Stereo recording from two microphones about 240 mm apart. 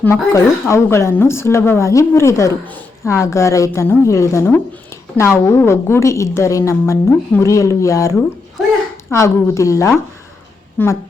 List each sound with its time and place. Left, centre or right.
0.0 s a woman's voice: centre
9.1 s a woman's voice: centre